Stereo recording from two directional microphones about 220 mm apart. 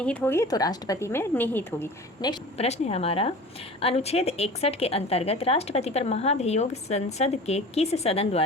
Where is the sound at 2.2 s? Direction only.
20° left (ahead or behind).